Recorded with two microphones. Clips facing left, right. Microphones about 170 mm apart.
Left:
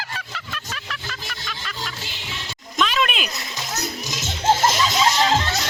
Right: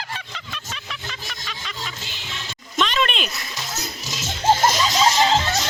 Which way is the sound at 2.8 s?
5° left (ahead or behind).